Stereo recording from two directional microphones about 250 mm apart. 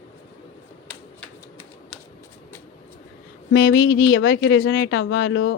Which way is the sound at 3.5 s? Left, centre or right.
Left.